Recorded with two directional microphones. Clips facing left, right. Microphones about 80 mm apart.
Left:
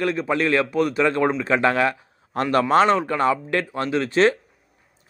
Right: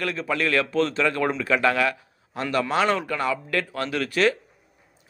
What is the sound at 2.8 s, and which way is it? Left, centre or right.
Speech, left.